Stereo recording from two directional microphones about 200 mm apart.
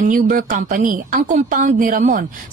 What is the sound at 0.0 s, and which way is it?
A woman's voice, 40° right (ahead or behind).